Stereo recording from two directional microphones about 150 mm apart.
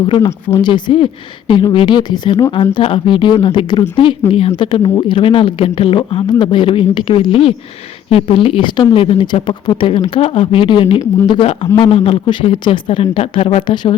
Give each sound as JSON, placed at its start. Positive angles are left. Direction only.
{"t": 0.0, "sound": "speech", "side_deg": 30}